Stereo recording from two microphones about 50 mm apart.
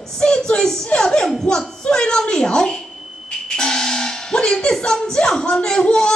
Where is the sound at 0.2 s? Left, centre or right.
Centre.